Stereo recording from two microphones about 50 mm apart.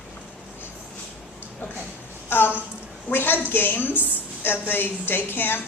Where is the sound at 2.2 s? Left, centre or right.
Left.